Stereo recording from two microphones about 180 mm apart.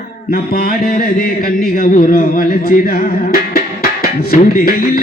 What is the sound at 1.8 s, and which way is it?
Speech, 55° left (ahead or behind).